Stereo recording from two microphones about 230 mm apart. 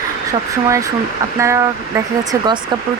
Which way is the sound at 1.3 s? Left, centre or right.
Centre.